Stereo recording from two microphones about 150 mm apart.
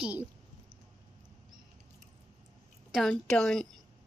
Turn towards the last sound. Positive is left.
turn(degrees=5)  # may be behind; listen again after turning